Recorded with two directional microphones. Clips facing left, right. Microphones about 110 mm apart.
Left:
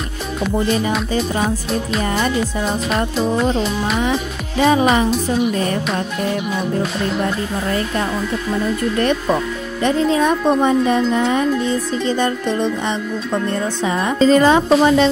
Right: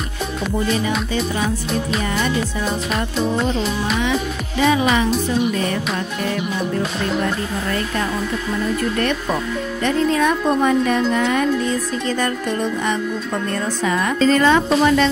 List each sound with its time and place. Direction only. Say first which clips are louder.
4.6 s music: left 3 dB; 35° left (ahead or behind)
9.8 s speech: left 2 dB; 30° left (ahead or behind)
14.8 s music: left 2 dB; 30° left (ahead or behind)